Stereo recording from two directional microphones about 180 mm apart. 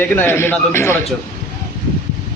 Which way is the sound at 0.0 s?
15° left (ahead or behind).